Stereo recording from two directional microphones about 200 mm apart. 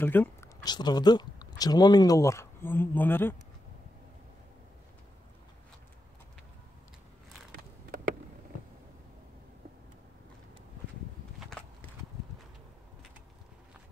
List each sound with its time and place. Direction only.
0.0 s speech: 10° left (ahead or behind)
0.7 s speech: 20° left (ahead or behind)